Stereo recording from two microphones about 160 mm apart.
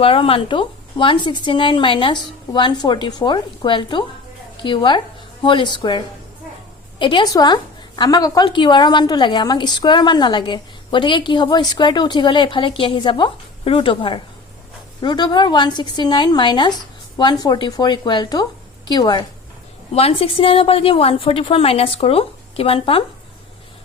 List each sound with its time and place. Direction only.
0.0 s a woman's voice: 35° left (ahead or behind)
7.0 s a woman's voice: 30° left (ahead or behind)
19.9 s speech: 40° left (ahead or behind)